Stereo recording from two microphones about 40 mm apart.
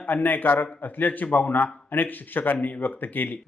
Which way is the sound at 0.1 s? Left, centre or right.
Left.